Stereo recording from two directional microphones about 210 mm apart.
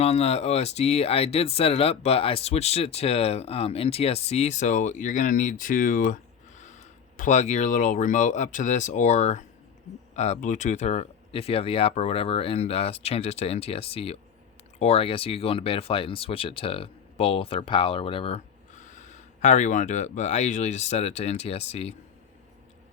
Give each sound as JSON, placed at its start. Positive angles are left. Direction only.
{"t": 0.0, "sound": "speech", "side_deg": 30}